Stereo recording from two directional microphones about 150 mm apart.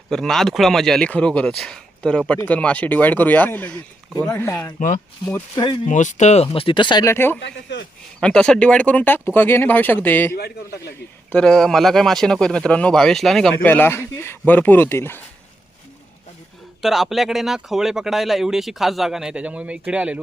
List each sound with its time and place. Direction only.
0.1 s speech: 5° left (ahead or behind)
5.5 s speech: 30° left (ahead or behind)
5.8 s speech: 55° left (ahead or behind); by 7.0 s 30° left (ahead or behind)
7.0 s speech: 15° left (ahead or behind)
8.2 s speech: 5° left (ahead or behind)
10.3 s a man's voice: 90° left
11.3 s a man's voice: 5° left (ahead or behind)
16.8 s a man's voice: centre (ahead or behind)